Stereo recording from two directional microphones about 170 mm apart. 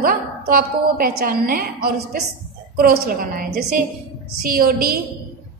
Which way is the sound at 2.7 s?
60° right (ahead or behind).